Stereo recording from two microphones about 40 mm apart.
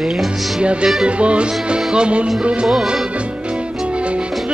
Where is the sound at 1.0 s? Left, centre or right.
Right.